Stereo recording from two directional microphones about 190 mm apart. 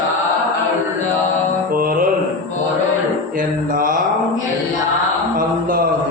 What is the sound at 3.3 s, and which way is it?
Mantra, 45° right (ahead or behind).